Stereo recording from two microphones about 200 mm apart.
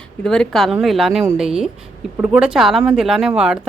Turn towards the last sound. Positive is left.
turn(degrees=0)  # may be behind; listen again after turning